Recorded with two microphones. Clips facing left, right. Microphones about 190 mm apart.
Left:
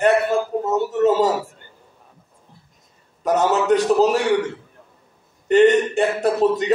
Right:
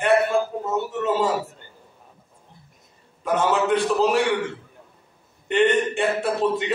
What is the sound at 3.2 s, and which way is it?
Speech, 40° left (ahead or behind).